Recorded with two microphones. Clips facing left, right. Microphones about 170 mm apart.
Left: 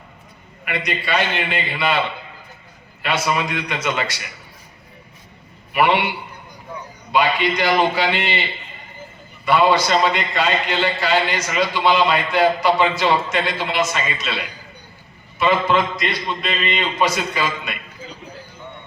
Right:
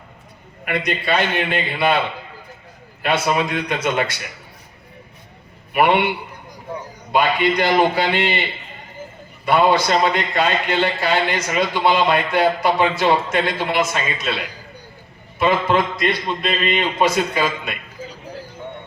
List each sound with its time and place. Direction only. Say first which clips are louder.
0.6 s a man's voice: right 3 dB; 50° right (ahead or behind)
3.0 s a man's voice: right 2 dB; 50° right (ahead or behind)
5.7 s a man's voice: right 2 dB; 50° right (ahead or behind)
9.5 s a man's voice: even; 55° right (ahead or behind)